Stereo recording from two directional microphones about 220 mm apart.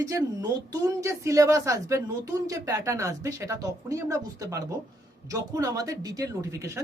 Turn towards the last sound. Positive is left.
turn(degrees=-15)  # may be behind; listen again after turning